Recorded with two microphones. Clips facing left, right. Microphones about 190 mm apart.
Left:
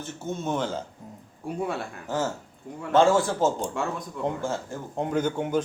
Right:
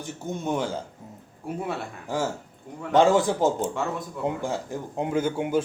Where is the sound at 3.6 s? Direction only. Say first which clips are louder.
Right 2 dB; 5° right (ahead or behind).